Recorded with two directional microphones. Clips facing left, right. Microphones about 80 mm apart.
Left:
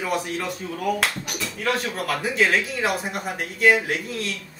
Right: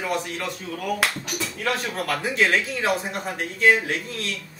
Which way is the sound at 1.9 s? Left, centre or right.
Centre.